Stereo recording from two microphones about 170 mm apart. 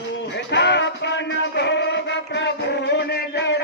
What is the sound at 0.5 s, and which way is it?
Music, 90° left.